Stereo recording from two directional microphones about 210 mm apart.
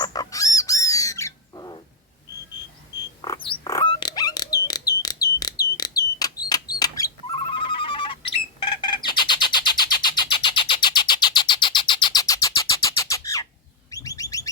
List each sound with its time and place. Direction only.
0.0 s bird: 20° left (ahead or behind)
3.2 s a sound: 25° left (ahead or behind)
13.9 s bird: 15° left (ahead or behind)